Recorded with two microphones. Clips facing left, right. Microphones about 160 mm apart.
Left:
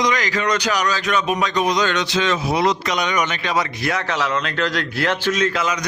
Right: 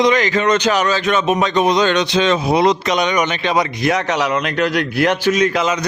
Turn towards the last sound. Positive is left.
turn(degrees=-20)  # may be behind; listen again after turning